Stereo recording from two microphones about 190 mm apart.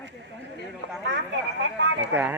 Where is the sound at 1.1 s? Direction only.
70° right (ahead or behind).